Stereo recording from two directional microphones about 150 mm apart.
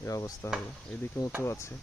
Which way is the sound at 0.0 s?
25° left (ahead or behind).